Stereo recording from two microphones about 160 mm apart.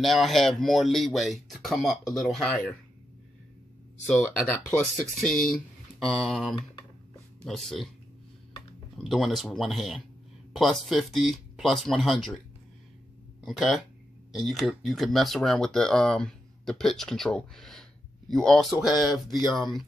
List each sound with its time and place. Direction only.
0.0 s speech: centre (ahead or behind)
4.0 s speech: 10° left (ahead or behind)
8.9 s speech: centre (ahead or behind)
13.4 s speech: centre (ahead or behind)